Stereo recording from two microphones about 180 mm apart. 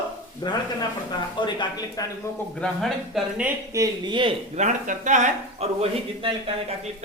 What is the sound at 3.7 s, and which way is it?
Speech, 20° right (ahead or behind).